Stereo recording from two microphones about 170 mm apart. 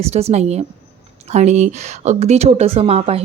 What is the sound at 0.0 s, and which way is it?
Speech, 40° right (ahead or behind).